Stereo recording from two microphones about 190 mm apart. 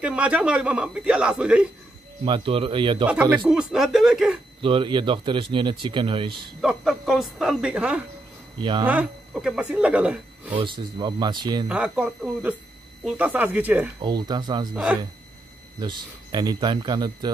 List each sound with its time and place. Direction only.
0.0 s a man's voice: 5° right (ahead or behind)
2.2 s speech: 25° right (ahead or behind)
3.1 s a man's voice: 5° right (ahead or behind)
4.6 s speech: 25° right (ahead or behind)
6.6 s a man's voice: 5° right (ahead or behind)
8.5 s speech: 25° right (ahead or behind)
8.8 s speech: 10° right (ahead or behind)
10.6 s speech: 25° right (ahead or behind)
11.7 s speech: 5° right (ahead or behind)
14.0 s speech: 20° right (ahead or behind)
14.7 s a man's voice: 5° right (ahead or behind)
15.8 s speech: 20° right (ahead or behind)